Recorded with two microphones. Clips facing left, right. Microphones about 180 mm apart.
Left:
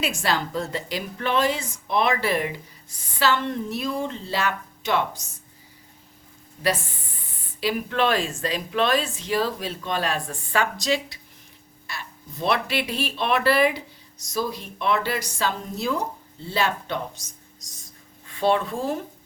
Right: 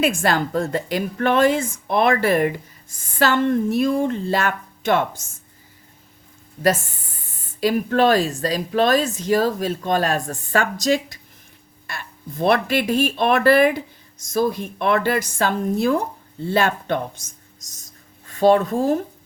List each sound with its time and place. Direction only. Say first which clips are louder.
0.0 s a woman's voice: right 6 dB; 50° right (ahead or behind)
6.6 s a woman's voice: right 6 dB; 45° right (ahead or behind)